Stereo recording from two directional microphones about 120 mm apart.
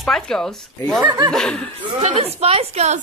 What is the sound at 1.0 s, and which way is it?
Speech, 35° right (ahead or behind).